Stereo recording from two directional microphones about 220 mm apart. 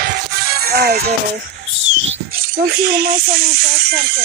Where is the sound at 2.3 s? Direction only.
45° right (ahead or behind).